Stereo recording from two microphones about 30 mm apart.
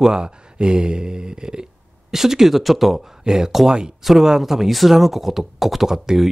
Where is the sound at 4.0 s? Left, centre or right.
Centre.